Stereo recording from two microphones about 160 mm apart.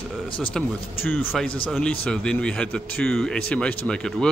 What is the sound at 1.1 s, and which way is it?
A man's voice, 10° left (ahead or behind).